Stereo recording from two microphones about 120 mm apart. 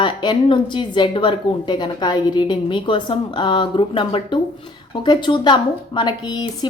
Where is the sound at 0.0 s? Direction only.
40° left (ahead or behind).